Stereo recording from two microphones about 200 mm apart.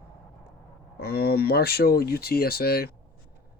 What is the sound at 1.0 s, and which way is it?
Speech, 50° left (ahead or behind).